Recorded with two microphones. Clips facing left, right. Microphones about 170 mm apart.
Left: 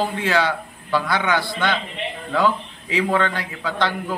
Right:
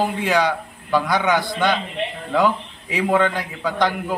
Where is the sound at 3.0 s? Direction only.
15° right (ahead or behind).